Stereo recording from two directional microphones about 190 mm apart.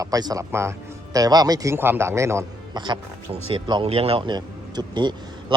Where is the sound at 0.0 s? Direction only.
20° right (ahead or behind).